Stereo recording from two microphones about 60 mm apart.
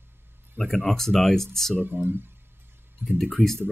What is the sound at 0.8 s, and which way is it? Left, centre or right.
Speech, centre.